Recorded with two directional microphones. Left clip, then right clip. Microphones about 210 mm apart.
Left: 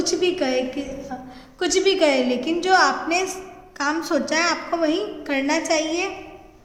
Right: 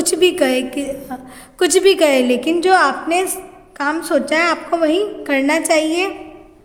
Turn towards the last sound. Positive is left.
turn(degrees=-40)  # may be behind; listen again after turning